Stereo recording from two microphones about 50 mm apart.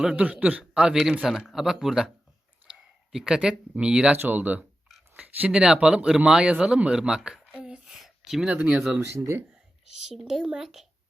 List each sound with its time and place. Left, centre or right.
0.2 s speech: right
0.7 s a man's voice: centre
4.1 s speech: right
5.5 s speech: centre
7.5 s a sound: centre
8.6 s speech: centre
9.0 s speech: right
10.1 s speech: centre